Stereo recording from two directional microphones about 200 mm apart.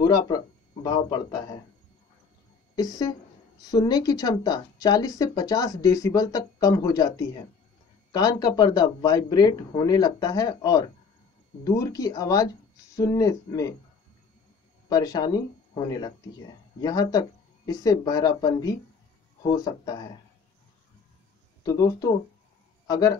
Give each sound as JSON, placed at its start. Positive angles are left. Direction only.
{"t": 0.0, "sound": "speech", "side_deg": 20}
{"t": 2.7, "sound": "speech", "side_deg": 20}
{"t": 14.9, "sound": "speech", "side_deg": 20}
{"t": 21.6, "sound": "speech", "side_deg": 20}